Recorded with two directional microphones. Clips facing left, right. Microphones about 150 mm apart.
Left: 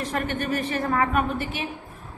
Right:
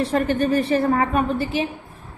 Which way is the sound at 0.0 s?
35° right (ahead or behind).